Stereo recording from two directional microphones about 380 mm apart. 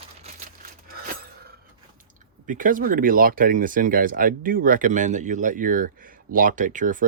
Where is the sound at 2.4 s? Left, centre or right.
Right.